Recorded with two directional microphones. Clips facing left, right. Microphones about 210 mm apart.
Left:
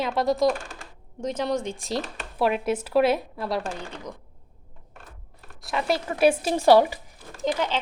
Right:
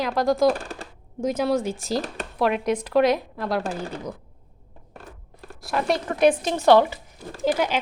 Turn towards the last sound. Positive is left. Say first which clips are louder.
# right 3 dB
turn(degrees=-10)  # may be behind; listen again after turning